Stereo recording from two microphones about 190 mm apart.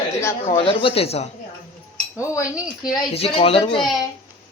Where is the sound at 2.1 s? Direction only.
15° left (ahead or behind).